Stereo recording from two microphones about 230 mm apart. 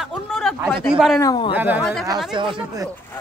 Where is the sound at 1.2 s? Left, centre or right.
Centre.